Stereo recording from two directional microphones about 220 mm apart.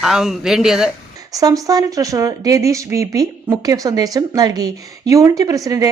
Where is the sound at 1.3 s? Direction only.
15° right (ahead or behind).